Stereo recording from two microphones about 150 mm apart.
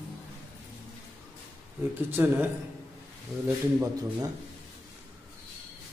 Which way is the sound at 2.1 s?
15° right (ahead or behind).